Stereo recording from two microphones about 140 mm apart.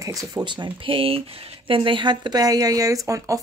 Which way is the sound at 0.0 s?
25° right (ahead or behind).